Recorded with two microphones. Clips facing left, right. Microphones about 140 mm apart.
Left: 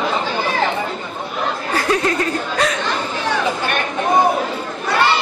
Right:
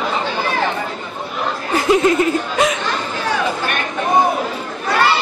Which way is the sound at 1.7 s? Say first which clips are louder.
Right 6 dB; 20° right (ahead or behind).